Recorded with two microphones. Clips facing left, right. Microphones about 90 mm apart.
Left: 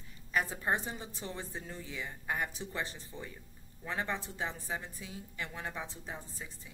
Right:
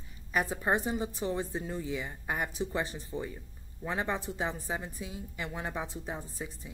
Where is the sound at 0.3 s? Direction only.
15° right (ahead or behind).